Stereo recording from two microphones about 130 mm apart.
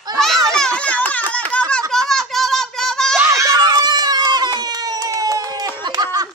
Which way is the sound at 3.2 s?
25° right (ahead or behind).